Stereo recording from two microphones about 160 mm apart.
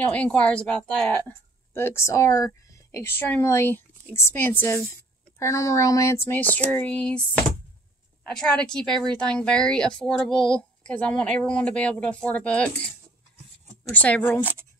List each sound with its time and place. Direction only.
0.1 s speech: 5° left (ahead or behind)
8.3 s speech: 5° left (ahead or behind)
13.9 s speech: 10° left (ahead or behind)